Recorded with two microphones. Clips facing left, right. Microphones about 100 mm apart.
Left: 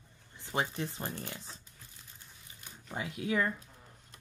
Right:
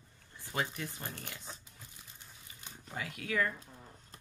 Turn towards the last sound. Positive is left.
turn(degrees=20)  # may be behind; listen again after turning